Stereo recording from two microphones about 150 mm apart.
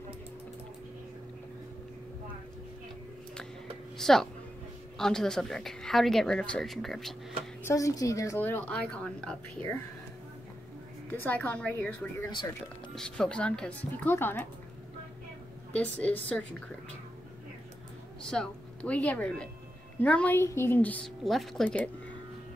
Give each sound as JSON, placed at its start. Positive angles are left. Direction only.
{"t": 4.0, "sound": "a woman's voice", "side_deg": 0}
{"t": 7.6, "sound": "speech", "side_deg": 20}
{"t": 8.4, "sound": "a woman's voice", "side_deg": 10}
{"t": 11.1, "sound": "a woman's voice", "side_deg": 10}
{"t": 12.9, "sound": "a woman's voice", "side_deg": 5}
{"t": 15.7, "sound": "a woman's voice", "side_deg": 10}
{"t": 18.3, "sound": "a woman's voice", "side_deg": 5}